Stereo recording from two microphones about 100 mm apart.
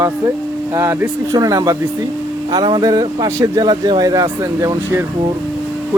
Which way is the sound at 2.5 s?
50° right (ahead or behind).